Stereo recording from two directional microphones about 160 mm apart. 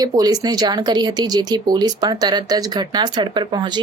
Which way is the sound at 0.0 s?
25° right (ahead or behind).